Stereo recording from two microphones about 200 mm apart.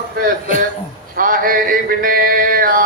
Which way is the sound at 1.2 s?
45° right (ahead or behind).